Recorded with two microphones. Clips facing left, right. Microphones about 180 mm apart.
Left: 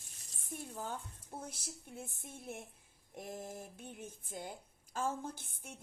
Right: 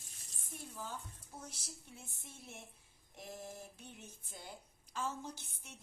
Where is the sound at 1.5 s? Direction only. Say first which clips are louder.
Left 4 dB; 55° left (ahead or behind).